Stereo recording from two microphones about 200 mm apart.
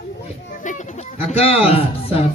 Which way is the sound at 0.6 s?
35° left (ahead or behind).